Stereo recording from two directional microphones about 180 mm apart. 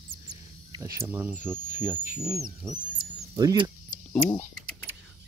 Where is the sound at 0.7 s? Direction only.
20° right (ahead or behind).